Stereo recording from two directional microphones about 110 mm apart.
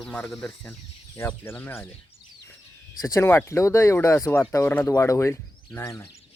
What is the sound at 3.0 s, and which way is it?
Speech, 25° left (ahead or behind).